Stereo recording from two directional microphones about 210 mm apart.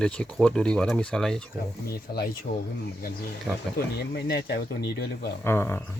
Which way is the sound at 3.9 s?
50° left (ahead or behind).